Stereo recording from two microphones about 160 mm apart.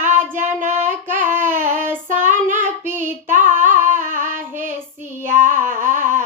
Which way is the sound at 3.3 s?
55° right (ahead or behind).